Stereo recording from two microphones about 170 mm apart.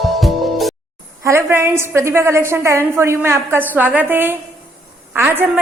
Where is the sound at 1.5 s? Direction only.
15° right (ahead or behind).